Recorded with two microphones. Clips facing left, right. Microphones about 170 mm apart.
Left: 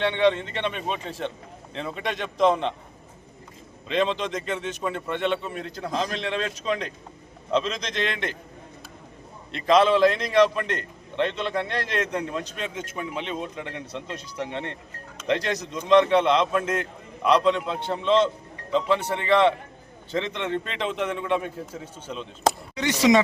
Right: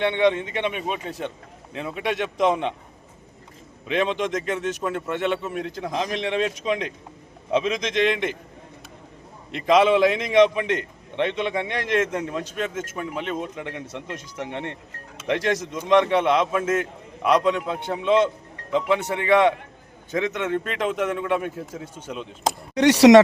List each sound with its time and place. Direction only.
0.0 s a man's voice: 10° right (ahead or behind)
3.8 s a man's voice: 10° right (ahead or behind)
8.1 s a man's voice: 10° right (ahead or behind)
9.5 s a man's voice: 10° right (ahead or behind)
12.7 s speech: 50° right (ahead or behind)
13.0 s speech: 5° right (ahead or behind)
15.2 s a man's voice: 10° right (ahead or behind)
22.7 s speech: 70° right (ahead or behind)